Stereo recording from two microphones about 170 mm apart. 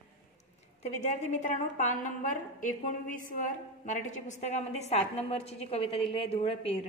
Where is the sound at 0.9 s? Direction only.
45° left (ahead or behind).